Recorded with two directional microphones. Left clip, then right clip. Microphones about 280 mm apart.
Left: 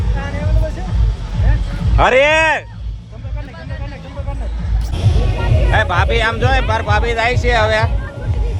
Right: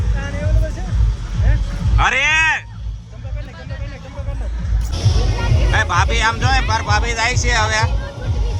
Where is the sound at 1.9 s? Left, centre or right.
Centre.